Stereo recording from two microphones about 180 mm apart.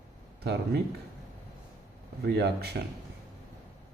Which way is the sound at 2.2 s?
65° right (ahead or behind).